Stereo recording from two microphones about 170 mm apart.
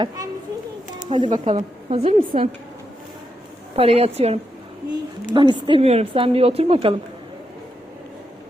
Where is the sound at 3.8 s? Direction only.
35° right (ahead or behind).